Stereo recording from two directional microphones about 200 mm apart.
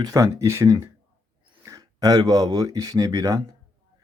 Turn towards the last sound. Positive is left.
turn(degrees=-15)  # may be behind; listen again after turning